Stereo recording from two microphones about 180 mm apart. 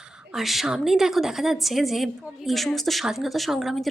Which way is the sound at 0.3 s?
Centre (ahead or behind).